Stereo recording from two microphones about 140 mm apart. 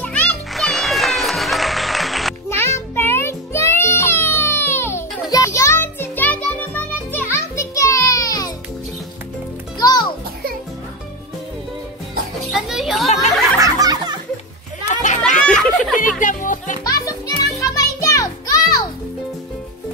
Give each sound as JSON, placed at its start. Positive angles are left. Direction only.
{"t": 0.0, "sound": "music", "side_deg": 10}
{"t": 2.5, "sound": "music", "side_deg": 20}
{"t": 9.8, "sound": "music", "side_deg": 30}
{"t": 12.4, "sound": "children playing", "side_deg": 0}
{"t": 13.6, "sound": "music", "side_deg": -25}
{"t": 14.9, "sound": "children playing", "side_deg": 60}
{"t": 15.4, "sound": "a sound", "side_deg": 5}
{"t": 15.9, "sound": "music", "side_deg": 70}
{"t": 17.6, "sound": "music", "side_deg": 25}